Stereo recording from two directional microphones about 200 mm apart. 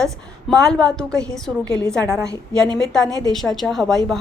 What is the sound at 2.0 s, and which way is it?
Speech, 15° right (ahead or behind).